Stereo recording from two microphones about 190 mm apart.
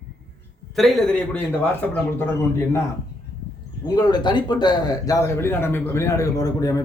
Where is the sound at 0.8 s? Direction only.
Centre (ahead or behind).